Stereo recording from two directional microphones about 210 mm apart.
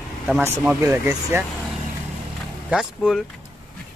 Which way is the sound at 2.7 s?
5° right (ahead or behind).